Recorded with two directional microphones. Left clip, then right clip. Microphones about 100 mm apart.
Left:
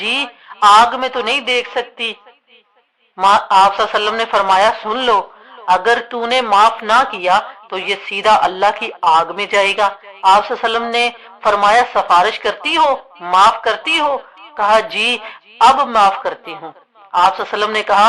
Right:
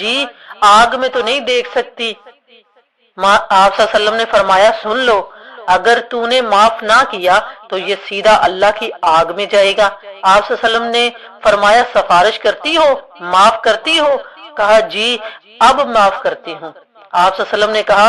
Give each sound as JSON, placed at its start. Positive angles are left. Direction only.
{"t": 0.0, "sound": "a man's voice", "side_deg": -35}
{"t": 3.2, "sound": "a woman's voice", "side_deg": -25}
{"t": 3.8, "sound": "a woman's voice", "side_deg": -35}